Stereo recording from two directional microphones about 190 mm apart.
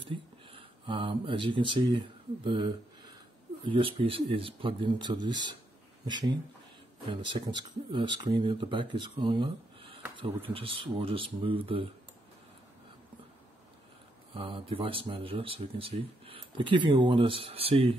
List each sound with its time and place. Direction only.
0.0 s speech: 25° right (ahead or behind)
14.3 s speech: 25° right (ahead or behind)